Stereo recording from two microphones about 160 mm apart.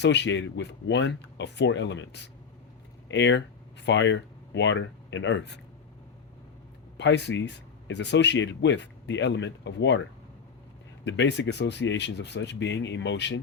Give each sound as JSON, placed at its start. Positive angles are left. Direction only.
{"t": 0.0, "sound": "speech", "side_deg": 90}
{"t": 6.9, "sound": "speech", "side_deg": 90}
{"t": 11.0, "sound": "speech", "side_deg": 90}